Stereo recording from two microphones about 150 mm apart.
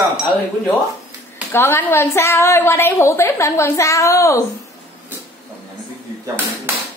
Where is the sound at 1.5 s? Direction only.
15° left (ahead or behind).